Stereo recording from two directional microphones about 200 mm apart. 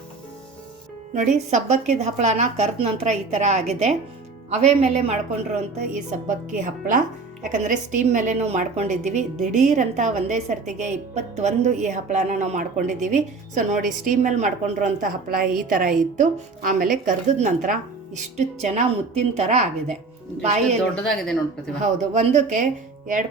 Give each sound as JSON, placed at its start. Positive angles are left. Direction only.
{"t": 1.1, "sound": "a woman's voice", "side_deg": -35}
{"t": 21.8, "sound": "a woman's voice", "side_deg": -35}